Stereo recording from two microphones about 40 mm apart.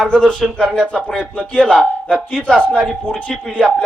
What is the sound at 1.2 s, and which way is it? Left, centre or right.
Speech, left.